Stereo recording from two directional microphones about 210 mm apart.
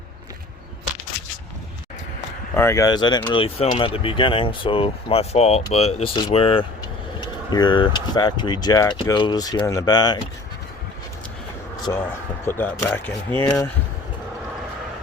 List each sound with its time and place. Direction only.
2.6 s speech: 15° left (ahead or behind)
12.5 s speech: 10° left (ahead or behind)